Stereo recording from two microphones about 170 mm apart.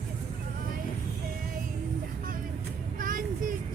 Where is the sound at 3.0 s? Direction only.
55° right (ahead or behind).